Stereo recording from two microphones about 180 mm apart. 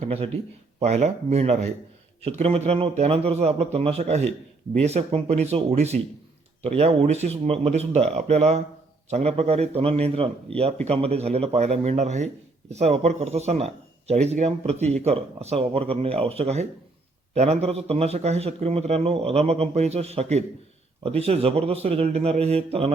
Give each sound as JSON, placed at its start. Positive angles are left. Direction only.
{"t": 0.0, "sound": "speech", "side_deg": -35}
{"t": 10.5, "sound": "speech", "side_deg": 5}
{"t": 10.8, "sound": "speech", "side_deg": -35}